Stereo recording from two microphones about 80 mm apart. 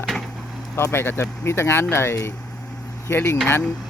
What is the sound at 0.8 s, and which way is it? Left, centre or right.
Speech, left.